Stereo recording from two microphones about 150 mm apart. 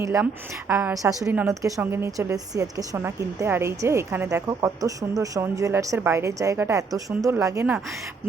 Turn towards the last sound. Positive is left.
turn(degrees=-15)  # may be behind; listen again after turning